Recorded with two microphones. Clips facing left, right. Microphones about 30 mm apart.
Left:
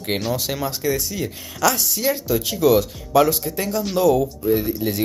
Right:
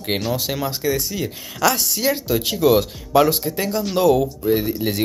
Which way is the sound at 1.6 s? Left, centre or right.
Right.